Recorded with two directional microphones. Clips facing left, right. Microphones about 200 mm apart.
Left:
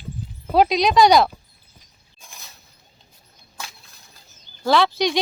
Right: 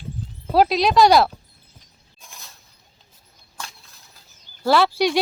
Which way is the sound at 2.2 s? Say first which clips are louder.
Even; centre (ahead or behind).